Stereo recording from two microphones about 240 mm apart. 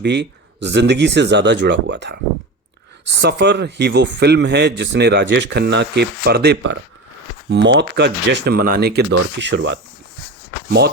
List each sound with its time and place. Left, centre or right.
0.0 s a man's voice: right